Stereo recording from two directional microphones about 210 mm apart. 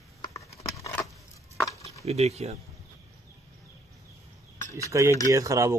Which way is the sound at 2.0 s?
30° right (ahead or behind).